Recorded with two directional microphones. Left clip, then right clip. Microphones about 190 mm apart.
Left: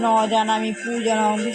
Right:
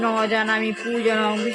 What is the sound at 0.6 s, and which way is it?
Speech, 15° right (ahead or behind).